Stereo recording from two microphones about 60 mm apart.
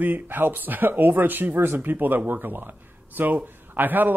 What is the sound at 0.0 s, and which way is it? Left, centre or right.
A man's voice, right.